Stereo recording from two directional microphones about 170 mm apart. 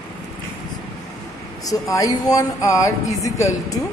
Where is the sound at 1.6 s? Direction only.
20° left (ahead or behind).